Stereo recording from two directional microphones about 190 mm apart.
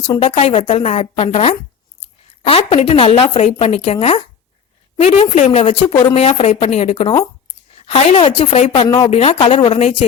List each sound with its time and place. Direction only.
0.0 s a woman's voice: 30° left (ahead or behind)